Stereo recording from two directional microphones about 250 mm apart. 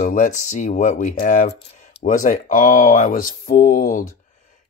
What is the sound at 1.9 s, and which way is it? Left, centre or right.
Speech, left.